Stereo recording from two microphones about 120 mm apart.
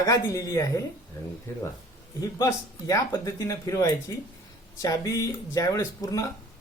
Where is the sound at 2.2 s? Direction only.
25° left (ahead or behind).